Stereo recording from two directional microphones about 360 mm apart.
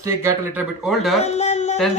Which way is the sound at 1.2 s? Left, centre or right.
Centre.